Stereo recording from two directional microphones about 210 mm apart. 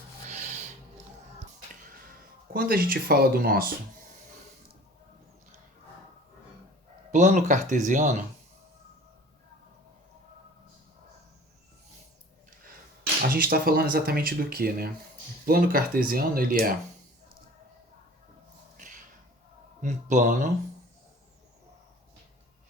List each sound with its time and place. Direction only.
0.3 s rub: 35° right (ahead or behind)
2.5 s speech: 45° right (ahead or behind)
7.1 s speech: 35° right (ahead or behind)
13.3 s speech: 45° right (ahead or behind)
19.8 s speech: 35° right (ahead or behind)